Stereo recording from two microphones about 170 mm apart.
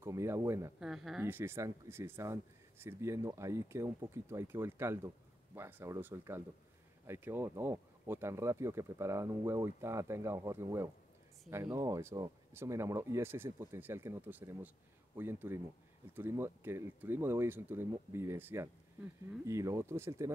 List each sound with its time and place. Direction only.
0.0 s speech: 15° right (ahead or behind)
0.7 s speech: centre (ahead or behind)
1.2 s speech: 15° right (ahead or behind)